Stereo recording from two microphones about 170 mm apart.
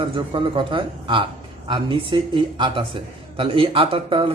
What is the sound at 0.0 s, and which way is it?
A man's voice, 30° right (ahead or behind).